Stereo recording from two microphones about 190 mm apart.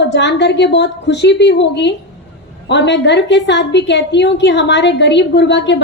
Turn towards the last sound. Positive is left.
turn(degrees=65)  # may be behind; listen again after turning